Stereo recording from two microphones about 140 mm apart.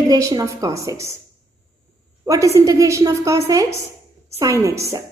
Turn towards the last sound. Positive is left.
turn(degrees=-20)  # may be behind; listen again after turning